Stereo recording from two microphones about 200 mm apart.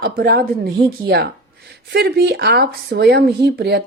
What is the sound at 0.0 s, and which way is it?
A woman's voice, 50° right (ahead or behind).